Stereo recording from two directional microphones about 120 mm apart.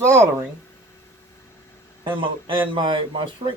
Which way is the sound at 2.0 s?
45° right (ahead or behind).